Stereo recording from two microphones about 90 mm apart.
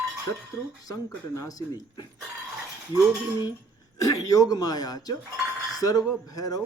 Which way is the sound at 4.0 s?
40° left (ahead or behind).